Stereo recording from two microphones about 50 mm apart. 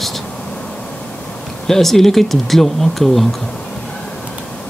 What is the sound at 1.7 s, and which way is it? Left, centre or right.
Speech, centre.